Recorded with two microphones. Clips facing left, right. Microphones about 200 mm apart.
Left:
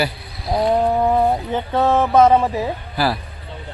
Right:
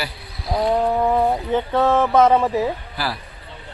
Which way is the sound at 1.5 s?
15° left (ahead or behind).